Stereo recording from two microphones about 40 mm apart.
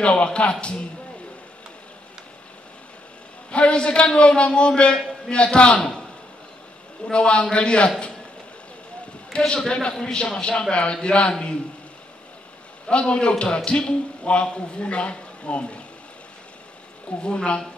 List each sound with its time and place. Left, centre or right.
0.0 s a man's voice: left
3.5 s a man's voice: left
5.8 s a man's voice: centre
7.1 s a man's voice: left
9.5 s a man's voice: centre
12.8 s a man's voice: left
17.2 s a man's voice: left